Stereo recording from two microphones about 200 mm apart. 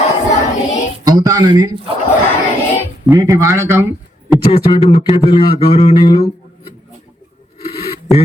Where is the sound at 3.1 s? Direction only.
15° right (ahead or behind).